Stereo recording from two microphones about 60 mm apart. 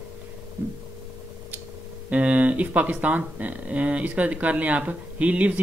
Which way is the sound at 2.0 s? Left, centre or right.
Right.